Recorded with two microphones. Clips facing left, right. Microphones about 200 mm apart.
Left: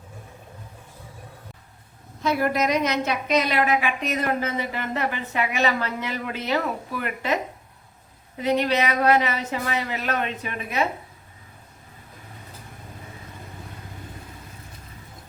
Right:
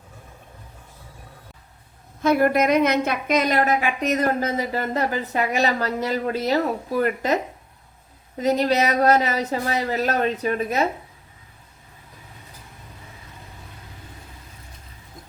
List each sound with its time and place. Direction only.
2.2 s a woman's voice: 55° right (ahead or behind)
8.4 s a woman's voice: 40° right (ahead or behind)